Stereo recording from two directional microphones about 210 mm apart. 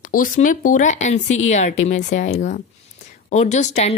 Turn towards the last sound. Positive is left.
turn(degrees=35)  # may be behind; listen again after turning